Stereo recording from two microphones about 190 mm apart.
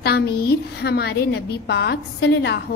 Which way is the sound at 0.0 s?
55° left (ahead or behind).